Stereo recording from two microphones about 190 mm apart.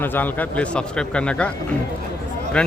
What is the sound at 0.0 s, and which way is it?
A man's voice, 10° left (ahead or behind).